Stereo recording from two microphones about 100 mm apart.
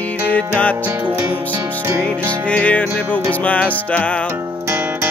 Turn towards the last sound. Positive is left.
turn(degrees=15)  # may be behind; listen again after turning